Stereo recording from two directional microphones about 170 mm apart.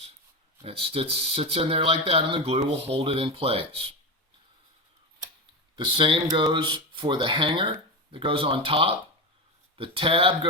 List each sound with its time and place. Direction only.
0.6 s speech: 35° right (ahead or behind)
5.7 s speech: 30° right (ahead or behind)